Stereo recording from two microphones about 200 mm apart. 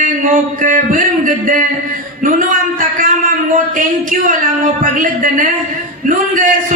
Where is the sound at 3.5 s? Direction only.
40° right (ahead or behind).